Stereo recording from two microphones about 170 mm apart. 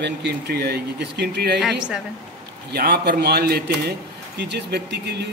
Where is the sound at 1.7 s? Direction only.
5° right (ahead or behind).